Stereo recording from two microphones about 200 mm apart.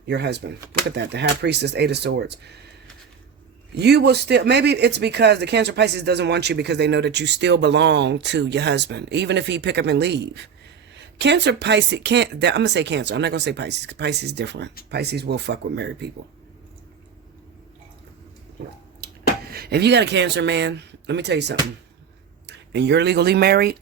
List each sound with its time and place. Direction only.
0.0 s speech: 55° right (ahead or behind)
3.8 s speech: 55° right (ahead or behind)
18.9 s speech: 50° right (ahead or behind)